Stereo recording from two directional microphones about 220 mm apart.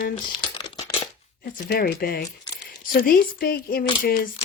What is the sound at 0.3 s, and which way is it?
Crumpling, 20° left (ahead or behind).